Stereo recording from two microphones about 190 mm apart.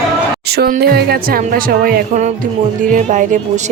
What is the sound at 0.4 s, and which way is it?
A woman's voice, 55° right (ahead or behind).